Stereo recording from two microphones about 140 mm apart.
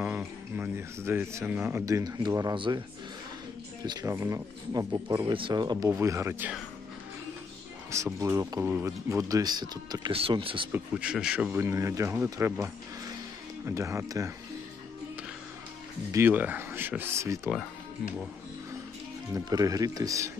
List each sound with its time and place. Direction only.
0.6 s speech: 15° right (ahead or behind); by 2.8 s 35° right (ahead or behind)
3.8 s speech: 25° right (ahead or behind)
5.3 s speech: 35° right (ahead or behind)
7.9 s speech: 20° right (ahead or behind)
10.1 s speech: 40° right (ahead or behind)
10.7 s speech: 10° right (ahead or behind)
16.1 s speech: 15° right (ahead or behind)
19.3 s speech: 25° right (ahead or behind)